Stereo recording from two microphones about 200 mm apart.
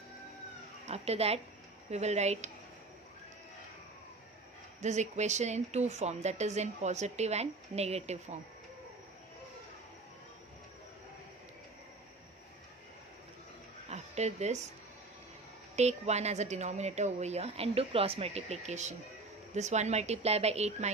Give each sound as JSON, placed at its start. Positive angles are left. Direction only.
{"t": 0.9, "sound": "speech", "side_deg": -30}
{"t": 4.8, "sound": "speech", "side_deg": -35}
{"t": 13.9, "sound": "a sound", "side_deg": -35}
{"t": 15.7, "sound": "speech", "side_deg": -35}